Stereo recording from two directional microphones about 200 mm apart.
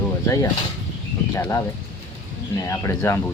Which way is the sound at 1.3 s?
15° left (ahead or behind).